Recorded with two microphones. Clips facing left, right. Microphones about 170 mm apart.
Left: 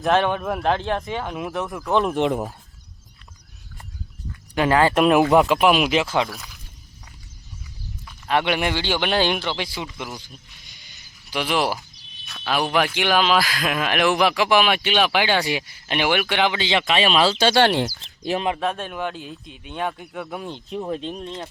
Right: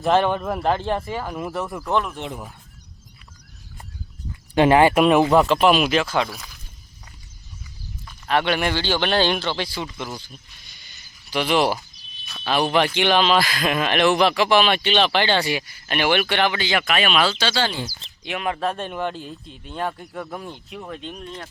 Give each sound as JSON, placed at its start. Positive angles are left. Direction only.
{"t": 0.1, "sound": "a man's voice", "side_deg": -10}
{"t": 0.3, "sound": "speech", "side_deg": 5}
{"t": 2.1, "sound": "speech", "side_deg": 90}
{"t": 4.5, "sound": "speech", "side_deg": -20}
{"t": 4.9, "sound": "speech", "side_deg": 0}
{"t": 6.0, "sound": "speech", "side_deg": 20}
{"t": 6.2, "sound": "speech", "side_deg": 0}
{"t": 8.3, "sound": "speech", "side_deg": 20}
{"t": 17.3, "sound": "speech", "side_deg": 50}
{"t": 17.6, "sound": "speech", "side_deg": 70}
{"t": 18.2, "sound": "speech", "side_deg": 35}
{"t": 18.9, "sound": "speech", "side_deg": 10}
{"t": 20.7, "sound": "speech", "side_deg": 30}